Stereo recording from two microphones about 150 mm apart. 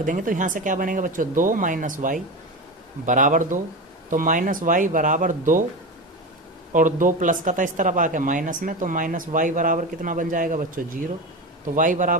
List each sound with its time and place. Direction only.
0.0 s speech: 65° right (ahead or behind)
6.7 s speech: 60° right (ahead or behind)